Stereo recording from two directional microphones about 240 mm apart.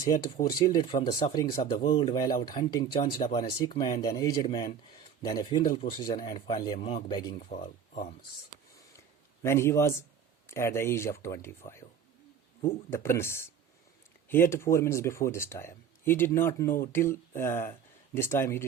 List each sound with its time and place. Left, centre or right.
0.6 s speech: centre
9.4 s speech: centre